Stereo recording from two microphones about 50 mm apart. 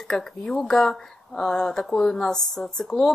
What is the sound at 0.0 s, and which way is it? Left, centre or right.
Speech, centre.